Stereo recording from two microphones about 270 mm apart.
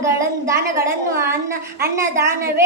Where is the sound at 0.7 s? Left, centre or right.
Centre.